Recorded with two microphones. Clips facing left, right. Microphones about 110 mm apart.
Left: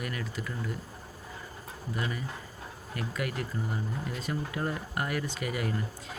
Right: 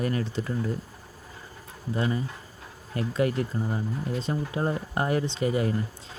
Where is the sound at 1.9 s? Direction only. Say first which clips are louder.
Right 7 dB; 30° right (ahead or behind).